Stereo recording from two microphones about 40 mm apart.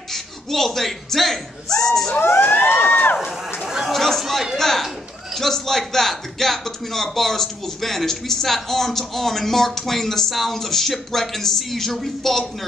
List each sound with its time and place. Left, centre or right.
0.1 s speech: centre
1.7 s speech: centre
2.1 s emergency vehicle: left
2.4 s a sound: left
3.6 s chatter: centre
3.9 s a man's voice: centre